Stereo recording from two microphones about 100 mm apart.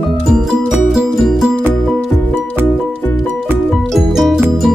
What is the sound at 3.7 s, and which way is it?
Music, centre (ahead or behind).